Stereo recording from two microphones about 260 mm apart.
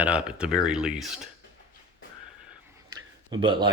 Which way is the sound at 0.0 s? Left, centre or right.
Centre.